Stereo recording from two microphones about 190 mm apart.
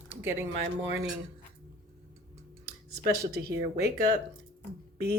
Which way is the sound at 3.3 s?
55° right (ahead or behind).